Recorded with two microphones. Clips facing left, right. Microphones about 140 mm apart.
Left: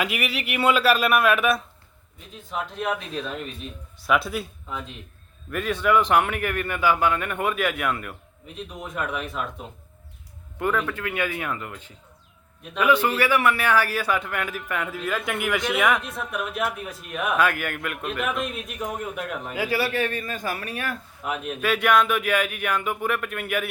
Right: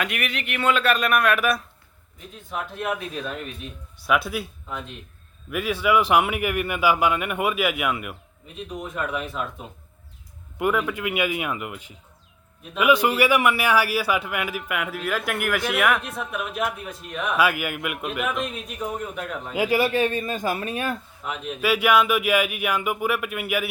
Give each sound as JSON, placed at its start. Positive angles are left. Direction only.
{"t": 0.0, "sound": "a man's voice", "side_deg": 5}
{"t": 10.6, "sound": "a man's voice", "side_deg": -10}
{"t": 17.3, "sound": "a man's voice", "side_deg": -5}
{"t": 19.5, "sound": "speech", "side_deg": -15}
{"t": 21.2, "sound": "a man's voice", "side_deg": 10}
{"t": 21.6, "sound": "speech", "side_deg": -5}